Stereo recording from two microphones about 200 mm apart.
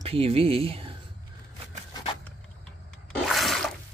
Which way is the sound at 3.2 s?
Centre (ahead or behind).